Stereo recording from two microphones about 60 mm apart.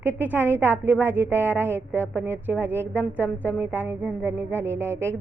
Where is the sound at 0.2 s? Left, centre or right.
Right.